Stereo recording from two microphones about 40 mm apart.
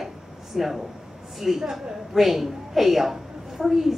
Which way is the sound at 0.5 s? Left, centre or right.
Centre.